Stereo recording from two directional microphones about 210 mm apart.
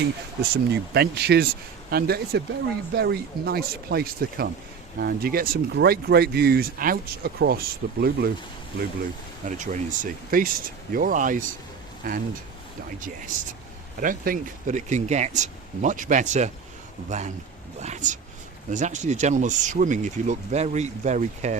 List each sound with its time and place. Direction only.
0.5 s speech: 50° right (ahead or behind)
9.6 s speech: 35° right (ahead or behind)
14.0 s speech: 40° right (ahead or behind)